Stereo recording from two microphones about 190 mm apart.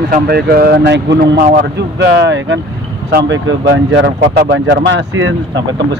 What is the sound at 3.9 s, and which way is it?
Speech, 70° right (ahead or behind).